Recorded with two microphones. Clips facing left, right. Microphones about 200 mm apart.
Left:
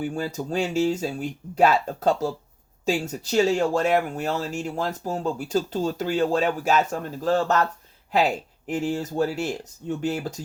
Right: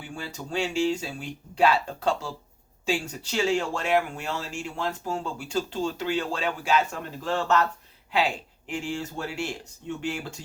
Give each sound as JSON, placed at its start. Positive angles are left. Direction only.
{"t": 0.0, "sound": "speech", "side_deg": 40}